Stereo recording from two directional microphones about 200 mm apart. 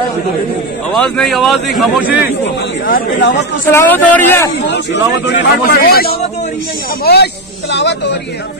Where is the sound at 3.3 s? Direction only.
60° left (ahead or behind).